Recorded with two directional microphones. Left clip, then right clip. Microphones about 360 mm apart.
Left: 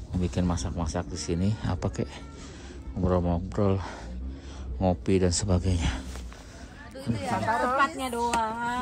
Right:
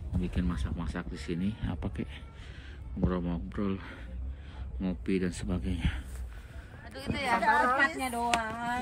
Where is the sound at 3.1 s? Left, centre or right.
Centre.